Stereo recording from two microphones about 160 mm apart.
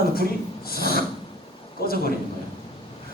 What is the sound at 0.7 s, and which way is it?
Speech, 70° left (ahead or behind).